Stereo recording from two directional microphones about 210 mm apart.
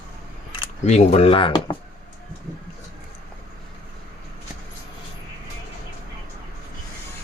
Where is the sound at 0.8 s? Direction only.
30° left (ahead or behind).